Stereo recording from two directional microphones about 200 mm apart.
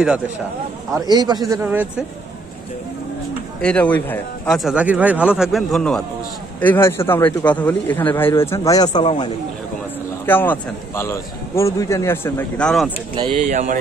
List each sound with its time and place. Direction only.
1.1 s speech: 20° right (ahead or behind)
3.6 s speech: 5° left (ahead or behind); by 9.3 s 25° left (ahead or behind)
10.2 s speech: 10° left (ahead or behind)
13.1 s speech: 25° right (ahead or behind)